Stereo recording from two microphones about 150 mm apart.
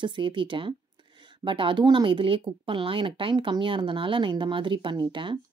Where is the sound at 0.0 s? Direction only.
30° right (ahead or behind).